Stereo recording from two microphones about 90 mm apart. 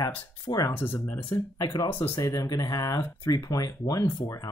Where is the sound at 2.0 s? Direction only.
35° left (ahead or behind).